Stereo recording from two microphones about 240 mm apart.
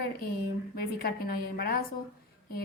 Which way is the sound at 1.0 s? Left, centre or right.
Left.